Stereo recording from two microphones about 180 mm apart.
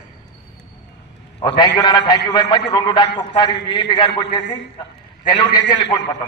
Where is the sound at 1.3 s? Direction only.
25° left (ahead or behind).